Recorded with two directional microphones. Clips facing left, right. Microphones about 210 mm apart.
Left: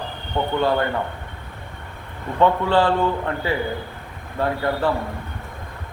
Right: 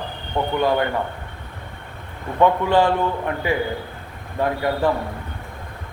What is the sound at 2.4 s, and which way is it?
Speech, 10° right (ahead or behind).